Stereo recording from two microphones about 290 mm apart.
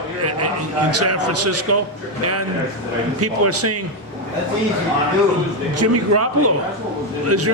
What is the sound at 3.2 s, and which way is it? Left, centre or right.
Speech, right.